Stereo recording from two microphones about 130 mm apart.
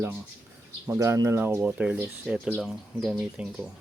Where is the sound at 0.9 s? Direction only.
20° right (ahead or behind).